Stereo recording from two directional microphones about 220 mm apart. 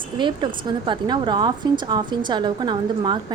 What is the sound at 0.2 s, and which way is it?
A woman's voice, 20° right (ahead or behind).